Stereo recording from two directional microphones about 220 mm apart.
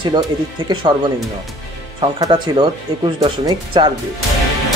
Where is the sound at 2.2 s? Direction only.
20° right (ahead or behind).